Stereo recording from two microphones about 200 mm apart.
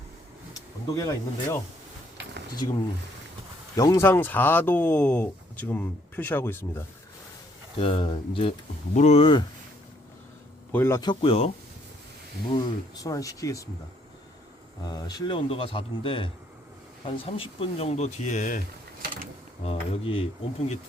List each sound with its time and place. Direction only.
0.5 s speech: 15° left (ahead or behind)
2.6 s speech: 25° left (ahead or behind)
3.8 s speech: 15° left (ahead or behind)
7.8 s speech: 25° left (ahead or behind)
10.7 s speech: 10° left (ahead or behind)
14.8 s speech: 20° left (ahead or behind); by 18.6 s 40° left (ahead or behind)
19.6 s speech: 25° left (ahead or behind)